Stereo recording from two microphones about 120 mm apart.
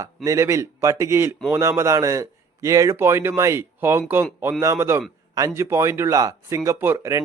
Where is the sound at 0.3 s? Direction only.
25° right (ahead or behind).